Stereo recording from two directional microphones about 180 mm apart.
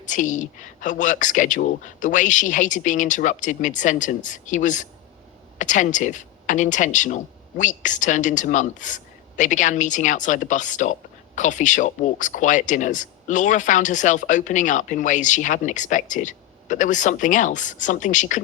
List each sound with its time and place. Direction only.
0.0 s speech: 45° left (ahead or behind)